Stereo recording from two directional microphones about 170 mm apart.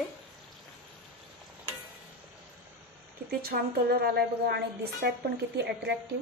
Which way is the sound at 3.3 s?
60° right (ahead or behind).